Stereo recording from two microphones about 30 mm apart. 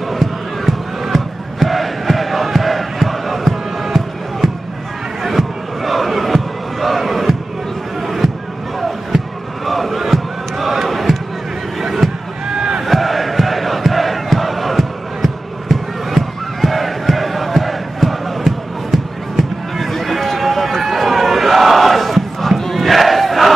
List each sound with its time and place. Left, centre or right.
0.1 s crowd: centre
5.2 s a sound: centre
9.7 s crowd: centre
12.0 s a sound: centre
12.4 s rowboat: right
12.8 s crowd: centre